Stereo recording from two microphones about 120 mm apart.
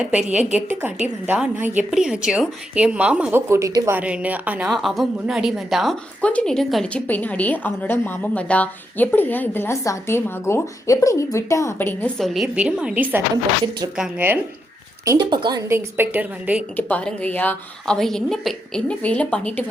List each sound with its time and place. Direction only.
0.5 s a woman's voice: 15° right (ahead or behind)
3.5 s speech: 30° right (ahead or behind)
3.9 s a woman's voice: 10° right (ahead or behind)
4.7 s a woman's voice: centre (ahead or behind)
6.9 s a woman's voice: 15° left (ahead or behind)
12.1 s a woman's voice: centre (ahead or behind)
13.3 s a woman's voice: 30° right (ahead or behind)
13.9 s a woman's voice: 5° right (ahead or behind)
15.2 s a woman's voice: 40° right (ahead or behind)
15.6 s a woman's voice: 20° right (ahead or behind)
16.7 s a woman's voice: 10° left (ahead or behind)
17.9 s a woman's voice: 5° left (ahead or behind)